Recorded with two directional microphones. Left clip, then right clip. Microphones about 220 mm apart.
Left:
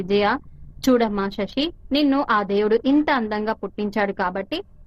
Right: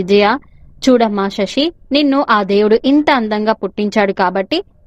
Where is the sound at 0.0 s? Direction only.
30° right (ahead or behind).